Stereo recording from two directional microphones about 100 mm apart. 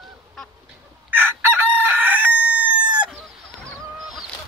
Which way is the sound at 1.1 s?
20° right (ahead or behind).